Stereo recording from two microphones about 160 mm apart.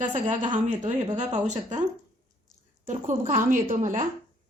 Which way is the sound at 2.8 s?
55° right (ahead or behind).